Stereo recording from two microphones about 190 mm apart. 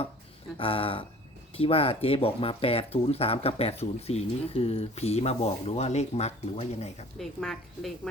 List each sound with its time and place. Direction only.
0.5 s speech: 30° left (ahead or behind)
7.2 s a woman's voice: centre (ahead or behind)